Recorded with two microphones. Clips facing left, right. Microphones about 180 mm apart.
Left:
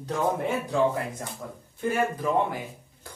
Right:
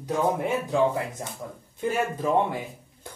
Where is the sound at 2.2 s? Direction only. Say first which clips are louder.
Right 4 dB; 25° right (ahead or behind).